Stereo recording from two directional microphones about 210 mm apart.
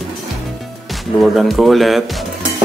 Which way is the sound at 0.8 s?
Centre (ahead or behind).